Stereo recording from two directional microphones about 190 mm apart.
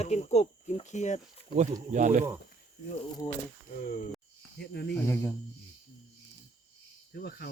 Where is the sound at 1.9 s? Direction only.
40° right (ahead or behind).